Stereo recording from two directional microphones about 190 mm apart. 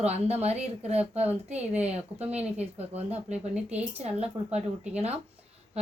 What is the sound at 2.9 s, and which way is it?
Speech, 35° right (ahead or behind).